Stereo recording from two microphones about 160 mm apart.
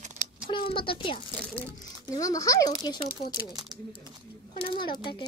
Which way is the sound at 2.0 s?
20° left (ahead or behind).